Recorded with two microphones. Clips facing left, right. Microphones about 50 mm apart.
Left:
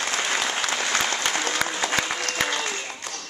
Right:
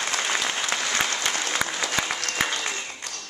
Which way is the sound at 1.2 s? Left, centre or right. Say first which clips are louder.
Left 2 dB; left.